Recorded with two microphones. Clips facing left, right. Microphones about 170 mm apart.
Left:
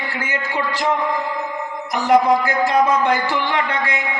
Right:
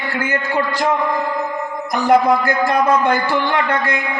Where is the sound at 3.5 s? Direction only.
45° right (ahead or behind).